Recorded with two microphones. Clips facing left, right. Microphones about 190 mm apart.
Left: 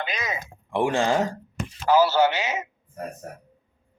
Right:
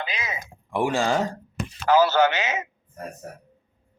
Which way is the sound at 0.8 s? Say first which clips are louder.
Left 1 dB; centre (ahead or behind).